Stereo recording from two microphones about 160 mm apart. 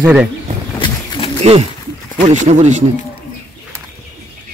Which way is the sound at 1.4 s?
40° right (ahead or behind).